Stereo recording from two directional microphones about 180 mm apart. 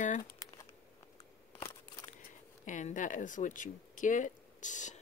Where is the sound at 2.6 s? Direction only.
45° left (ahead or behind).